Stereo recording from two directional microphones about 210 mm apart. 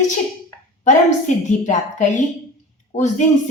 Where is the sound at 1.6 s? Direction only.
35° left (ahead or behind).